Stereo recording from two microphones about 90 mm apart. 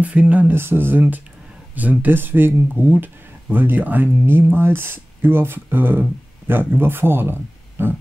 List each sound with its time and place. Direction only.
0.0 s speech: 15° right (ahead or behind)